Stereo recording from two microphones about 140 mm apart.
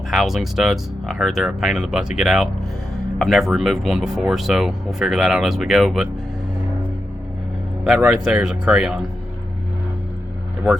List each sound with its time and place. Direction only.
0.1 s speech: centre (ahead or behind)
7.9 s speech: 5° right (ahead or behind)